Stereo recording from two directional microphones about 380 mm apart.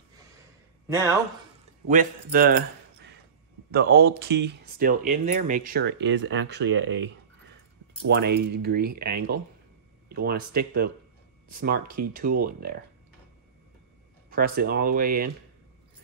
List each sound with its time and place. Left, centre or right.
0.8 s speech: centre
1.9 s speech: right
8.1 s speech: right
12.2 s speech: right
14.3 s speech: right